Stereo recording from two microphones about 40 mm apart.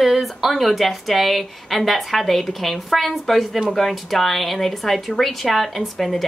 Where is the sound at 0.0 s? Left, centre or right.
Centre.